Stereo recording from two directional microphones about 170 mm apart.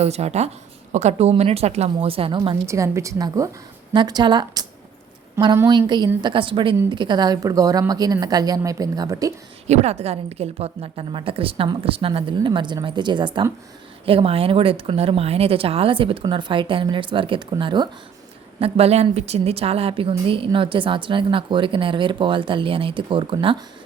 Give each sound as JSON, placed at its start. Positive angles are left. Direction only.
{"t": 0.0, "sound": "a woman's voice", "side_deg": -40}
{"t": 2.6, "sound": "a woman's voice", "side_deg": -15}
{"t": 9.6, "sound": "a woman's voice", "side_deg": -40}